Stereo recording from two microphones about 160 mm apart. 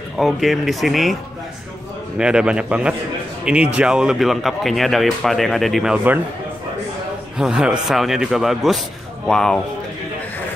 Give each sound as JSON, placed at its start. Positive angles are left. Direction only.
{"t": 0.2, "sound": "speech", "side_deg": 0}
{"t": 2.1, "sound": "speech", "side_deg": -5}
{"t": 7.3, "sound": "speech", "side_deg": -5}